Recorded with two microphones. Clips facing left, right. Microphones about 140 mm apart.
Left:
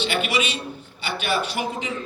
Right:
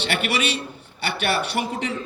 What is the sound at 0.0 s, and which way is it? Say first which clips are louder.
A man's voice: even; 65° right (ahead or behind).